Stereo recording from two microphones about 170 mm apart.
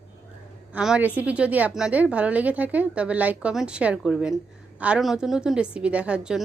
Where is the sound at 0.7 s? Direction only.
5° right (ahead or behind).